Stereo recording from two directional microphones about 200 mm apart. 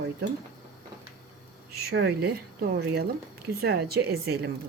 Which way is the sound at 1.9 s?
55° right (ahead or behind).